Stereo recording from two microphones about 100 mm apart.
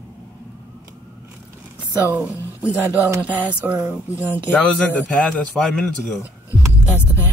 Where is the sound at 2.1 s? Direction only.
15° right (ahead or behind).